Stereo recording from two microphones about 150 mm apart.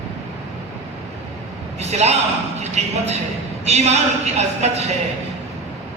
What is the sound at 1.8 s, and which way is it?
Speech, 45° right (ahead or behind).